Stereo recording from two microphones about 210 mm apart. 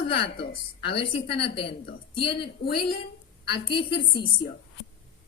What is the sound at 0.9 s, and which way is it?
A woman's voice, 25° left (ahead or behind).